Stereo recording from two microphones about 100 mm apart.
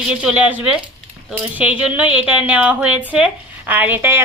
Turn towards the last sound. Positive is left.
turn(degrees=-20)  # may be behind; listen again after turning